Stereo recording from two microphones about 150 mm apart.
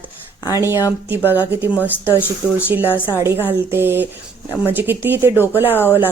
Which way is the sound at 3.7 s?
15° right (ahead or behind).